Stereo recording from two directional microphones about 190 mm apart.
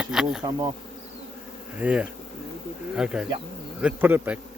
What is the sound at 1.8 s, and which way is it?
Bee, 5° right (ahead or behind).